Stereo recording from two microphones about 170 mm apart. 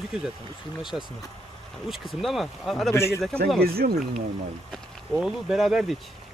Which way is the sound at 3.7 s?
65° right (ahead or behind).